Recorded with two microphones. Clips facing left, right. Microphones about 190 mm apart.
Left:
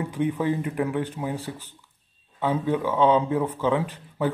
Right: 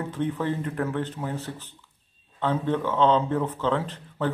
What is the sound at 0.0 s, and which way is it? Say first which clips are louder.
Speech: left 3 dB; 10° left (ahead or behind).